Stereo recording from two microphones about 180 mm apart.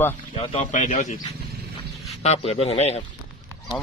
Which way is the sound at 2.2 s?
35° left (ahead or behind).